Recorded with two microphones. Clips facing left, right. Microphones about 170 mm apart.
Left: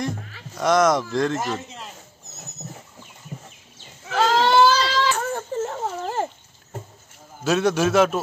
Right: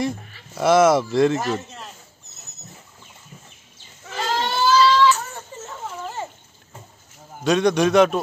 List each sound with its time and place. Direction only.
0.6 s speech: 5° right (ahead or behind)
4.1 s livestock: 90° left
4.8 s baby cry: 50° left (ahead or behind)
7.4 s speech: 5° left (ahead or behind)